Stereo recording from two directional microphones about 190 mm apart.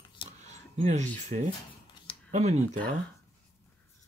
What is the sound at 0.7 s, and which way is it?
Speech, 35° right (ahead or behind).